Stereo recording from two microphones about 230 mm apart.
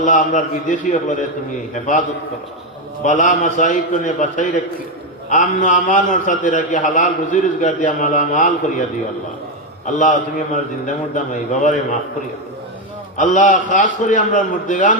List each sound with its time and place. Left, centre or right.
0.0 s a man's voice: left
3.0 s a man's voice: left
9.8 s a man's voice: left
13.1 s a man's voice: left